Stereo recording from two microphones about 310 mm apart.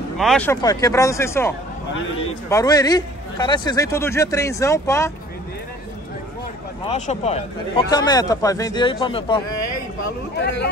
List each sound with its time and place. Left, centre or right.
0.2 s a man's voice: centre
2.5 s a man's voice: centre
6.9 s a man's voice: centre
9.6 s a sound: left